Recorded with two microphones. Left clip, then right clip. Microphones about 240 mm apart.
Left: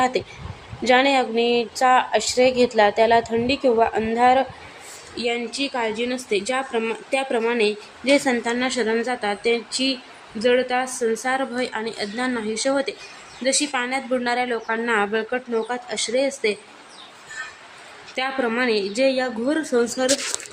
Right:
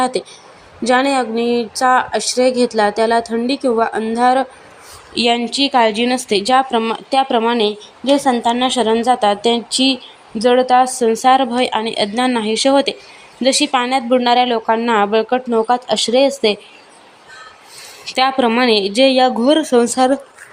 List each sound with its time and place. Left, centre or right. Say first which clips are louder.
0.0 s a woman's voice: right 3 dB; right
18.0 s speech: right 10 dB; right